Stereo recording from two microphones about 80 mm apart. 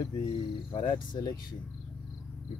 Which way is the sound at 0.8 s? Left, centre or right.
Left.